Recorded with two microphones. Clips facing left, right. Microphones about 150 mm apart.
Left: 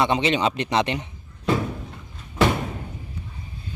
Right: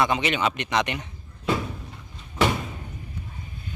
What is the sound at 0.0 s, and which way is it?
A man's voice, 30° left (ahead or behind).